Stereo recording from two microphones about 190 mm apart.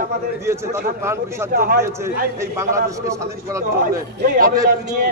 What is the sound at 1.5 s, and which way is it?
Speech, 50° right (ahead or behind).